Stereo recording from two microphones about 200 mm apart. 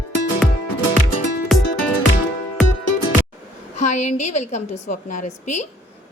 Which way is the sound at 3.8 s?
35° left (ahead or behind).